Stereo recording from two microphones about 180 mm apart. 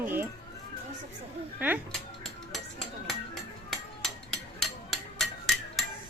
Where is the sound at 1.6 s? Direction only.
10° right (ahead or behind).